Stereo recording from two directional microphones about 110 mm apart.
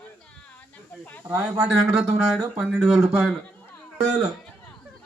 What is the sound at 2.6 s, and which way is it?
Speech, 5° right (ahead or behind).